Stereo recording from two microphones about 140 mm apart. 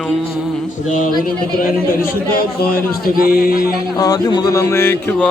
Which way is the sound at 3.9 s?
25° left (ahead or behind).